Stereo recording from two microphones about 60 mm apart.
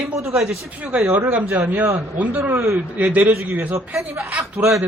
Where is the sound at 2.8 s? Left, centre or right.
Right.